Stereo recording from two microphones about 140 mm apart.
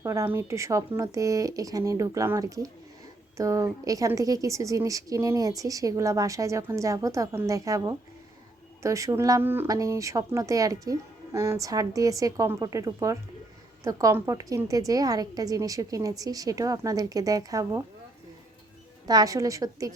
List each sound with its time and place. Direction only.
0.0 s speech: 20° right (ahead or behind)
19.0 s speech: 25° right (ahead or behind)